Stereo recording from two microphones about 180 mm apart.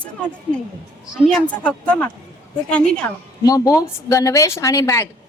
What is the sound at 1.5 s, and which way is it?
A woman's voice, 5° left (ahead or behind).